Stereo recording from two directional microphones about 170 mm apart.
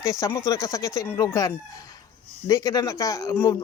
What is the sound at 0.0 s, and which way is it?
Speech, 20° left (ahead or behind).